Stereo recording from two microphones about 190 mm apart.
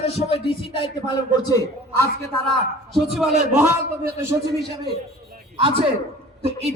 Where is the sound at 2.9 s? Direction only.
Centre (ahead or behind).